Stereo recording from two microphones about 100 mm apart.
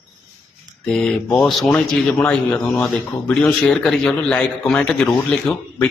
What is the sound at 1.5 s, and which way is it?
Speech, centre (ahead or behind).